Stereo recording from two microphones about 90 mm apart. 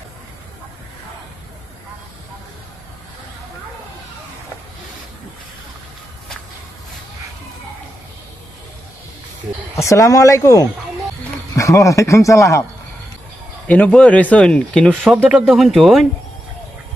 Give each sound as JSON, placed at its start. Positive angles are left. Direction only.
{"t": 9.8, "sound": "a man's voice", "side_deg": 35}
{"t": 13.7, "sound": "speech", "side_deg": 15}